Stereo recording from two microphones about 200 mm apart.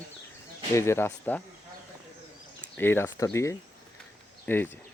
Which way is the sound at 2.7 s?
10° left (ahead or behind).